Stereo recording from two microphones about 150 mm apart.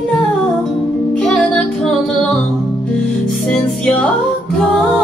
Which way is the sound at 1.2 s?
5° left (ahead or behind).